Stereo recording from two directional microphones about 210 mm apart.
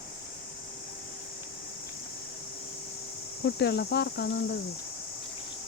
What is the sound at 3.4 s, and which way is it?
Speech, 50° left (ahead or behind).